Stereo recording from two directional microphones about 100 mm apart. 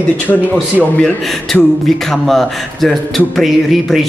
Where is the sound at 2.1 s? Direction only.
5° left (ahead or behind).